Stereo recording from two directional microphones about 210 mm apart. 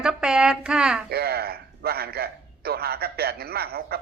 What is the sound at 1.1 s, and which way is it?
A man's voice, 50° right (ahead or behind).